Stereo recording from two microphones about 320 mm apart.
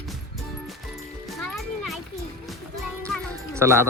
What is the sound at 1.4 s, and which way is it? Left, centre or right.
Music, centre.